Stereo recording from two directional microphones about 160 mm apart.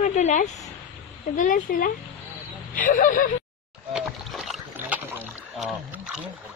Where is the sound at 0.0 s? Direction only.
45° left (ahead or behind).